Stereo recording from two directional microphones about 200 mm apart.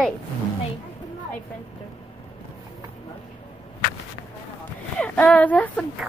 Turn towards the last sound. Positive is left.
turn(degrees=5)  # may be behind; listen again after turning